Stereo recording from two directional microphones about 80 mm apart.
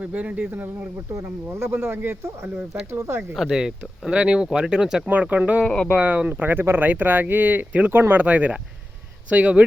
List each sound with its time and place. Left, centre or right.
0.0 s speech: centre
3.3 s speech: centre
5.6 s speech: centre
6.0 s speech: centre